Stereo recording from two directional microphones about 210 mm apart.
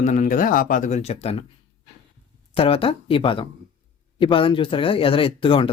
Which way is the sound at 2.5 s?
25° left (ahead or behind).